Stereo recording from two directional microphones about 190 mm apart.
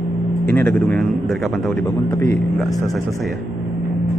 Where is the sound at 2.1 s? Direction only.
15° left (ahead or behind).